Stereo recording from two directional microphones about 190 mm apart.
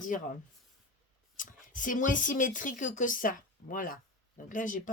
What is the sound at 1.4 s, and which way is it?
Speech, 45° left (ahead or behind).